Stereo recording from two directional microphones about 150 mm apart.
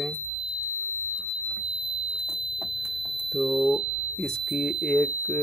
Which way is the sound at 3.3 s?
Centre (ahead or behind).